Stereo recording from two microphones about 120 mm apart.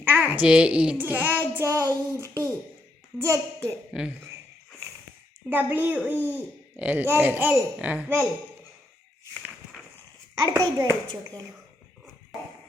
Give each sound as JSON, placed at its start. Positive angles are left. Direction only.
{"t": 0.0, "sound": "a child's voice", "side_deg": -15}
{"t": 5.5, "sound": "speech", "side_deg": -15}
{"t": 6.1, "sound": "speech", "side_deg": 20}
{"t": 6.7, "sound": "speech", "side_deg": -15}
{"t": 10.3, "sound": "a child's voice", "side_deg": -30}